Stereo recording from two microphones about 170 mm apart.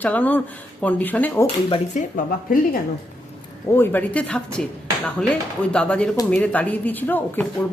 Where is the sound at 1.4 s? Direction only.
35° left (ahead or behind).